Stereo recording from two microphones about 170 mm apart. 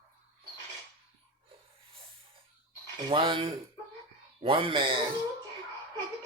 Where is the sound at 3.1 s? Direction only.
30° right (ahead or behind).